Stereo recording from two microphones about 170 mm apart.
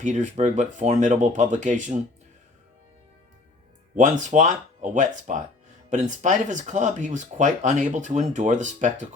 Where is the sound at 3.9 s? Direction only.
45° right (ahead or behind).